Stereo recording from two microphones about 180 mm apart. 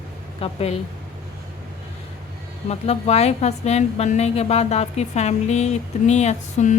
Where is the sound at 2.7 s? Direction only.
35° left (ahead or behind).